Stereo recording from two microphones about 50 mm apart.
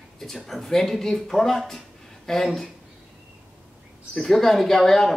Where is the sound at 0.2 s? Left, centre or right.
Centre.